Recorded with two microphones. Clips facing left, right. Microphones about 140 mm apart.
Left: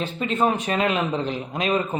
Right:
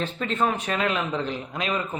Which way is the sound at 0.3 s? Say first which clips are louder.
Left 3 dB; 20° left (ahead or behind).